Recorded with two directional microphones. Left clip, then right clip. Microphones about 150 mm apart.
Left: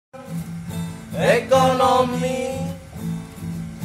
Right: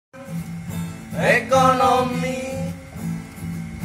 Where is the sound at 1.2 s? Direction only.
90° left.